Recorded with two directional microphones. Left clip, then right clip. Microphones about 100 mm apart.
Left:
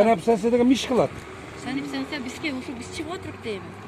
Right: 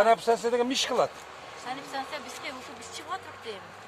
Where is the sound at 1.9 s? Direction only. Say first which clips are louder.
Left 4 dB; 50° right (ahead or behind).